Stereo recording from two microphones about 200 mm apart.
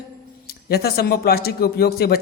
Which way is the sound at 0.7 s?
50° left (ahead or behind).